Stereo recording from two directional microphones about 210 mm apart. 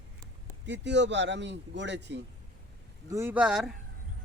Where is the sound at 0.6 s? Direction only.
55° right (ahead or behind).